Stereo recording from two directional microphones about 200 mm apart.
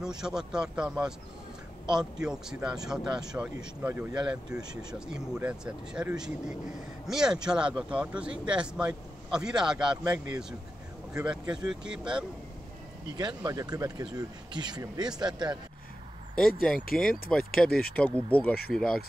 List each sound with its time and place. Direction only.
0.0 s speech: 5° right (ahead or behind)
13.2 s speech: 20° right (ahead or behind)
17.1 s speech: 5° left (ahead or behind)
17.6 s speech: 50° left (ahead or behind)
17.9 s speech: 5° left (ahead or behind)